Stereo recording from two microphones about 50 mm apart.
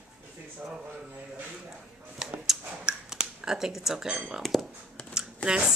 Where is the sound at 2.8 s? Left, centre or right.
Centre.